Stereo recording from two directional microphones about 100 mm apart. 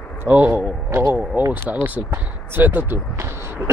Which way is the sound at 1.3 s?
20° right (ahead or behind).